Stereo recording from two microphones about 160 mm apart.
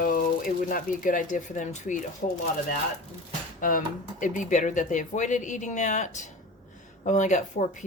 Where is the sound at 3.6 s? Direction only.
60° left (ahead or behind).